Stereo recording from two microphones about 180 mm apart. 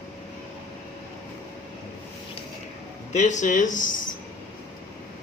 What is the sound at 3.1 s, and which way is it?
Speech, 40° left (ahead or behind).